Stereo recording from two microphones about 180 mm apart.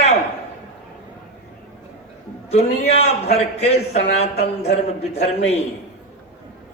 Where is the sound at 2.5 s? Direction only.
35° left (ahead or behind).